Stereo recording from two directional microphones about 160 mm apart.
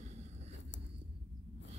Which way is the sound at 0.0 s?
45° right (ahead or behind).